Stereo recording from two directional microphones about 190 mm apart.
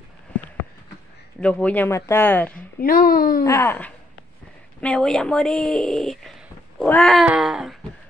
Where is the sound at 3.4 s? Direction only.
15° left (ahead or behind); by 7.8 s centre (ahead or behind).